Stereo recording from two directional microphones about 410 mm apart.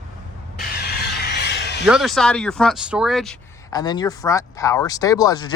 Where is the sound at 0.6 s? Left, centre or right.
Left.